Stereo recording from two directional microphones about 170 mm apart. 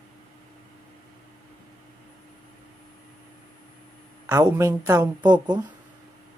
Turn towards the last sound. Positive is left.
turn(degrees=-25)  # may be behind; listen again after turning